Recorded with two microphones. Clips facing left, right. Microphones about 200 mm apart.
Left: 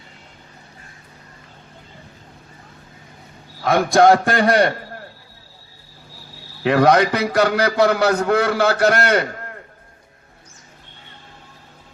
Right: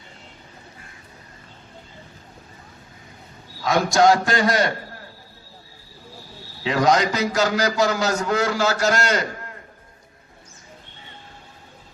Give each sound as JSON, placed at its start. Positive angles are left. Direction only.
{"t": 3.6, "sound": "a man's voice", "side_deg": 55}
{"t": 6.6, "sound": "a man's voice", "side_deg": 60}